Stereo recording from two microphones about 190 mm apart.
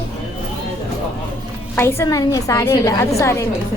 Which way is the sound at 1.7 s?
15° left (ahead or behind).